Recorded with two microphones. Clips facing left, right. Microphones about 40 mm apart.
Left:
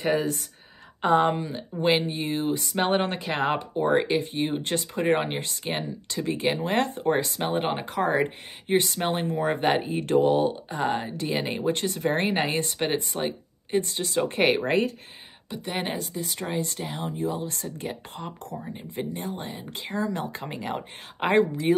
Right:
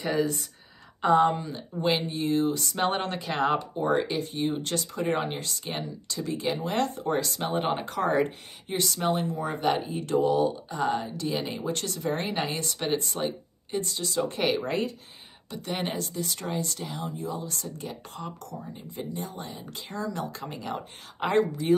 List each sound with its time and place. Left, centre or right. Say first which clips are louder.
0.0 s speech: left 2 dB; left
1.3 s speech: left 2 dB; left
8.6 s speech: left 3 dB; left
11.7 s speech: left 4 dB; left
12.0 s speech: left 4 dB; left
15.5 s speech: left 1 dB; centre; by 21.5 s left